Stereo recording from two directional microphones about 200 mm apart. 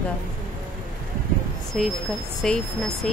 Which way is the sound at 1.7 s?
Centre (ahead or behind).